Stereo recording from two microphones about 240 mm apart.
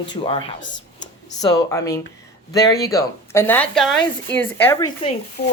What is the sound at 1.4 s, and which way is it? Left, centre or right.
Speech, centre.